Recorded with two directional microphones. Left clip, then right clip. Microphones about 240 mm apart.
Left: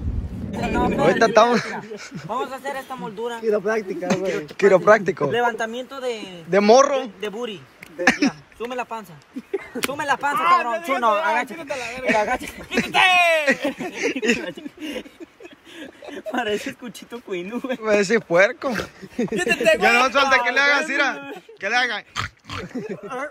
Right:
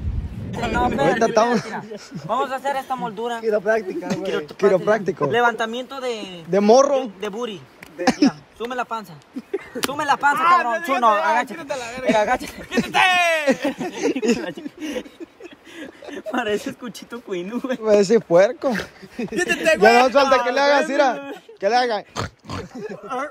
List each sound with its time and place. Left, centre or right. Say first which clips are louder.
0.6 s speech: right 1 dB; centre
2.7 s a man's voice: right 6 dB; centre
3.4 s a man's voice: right 1 dB; left
4.1 s a man's voice: left 2 dB; centre
6.6 s a man's voice: even; centre
14.1 s speech: even; centre
15.8 s a sound: right 1 dB; centre
16.8 s a man's voice: right 2 dB; centre
17.8 s speech: right 3 dB; centre
18.8 s a man's voice: left 2 dB; left
19.3 s a man's voice: even; centre
20.1 s speech: right 1 dB; centre
22.8 s a man's voice: right 6 dB; centre